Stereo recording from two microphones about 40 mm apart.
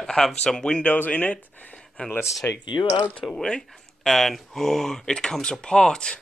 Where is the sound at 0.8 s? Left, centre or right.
Left.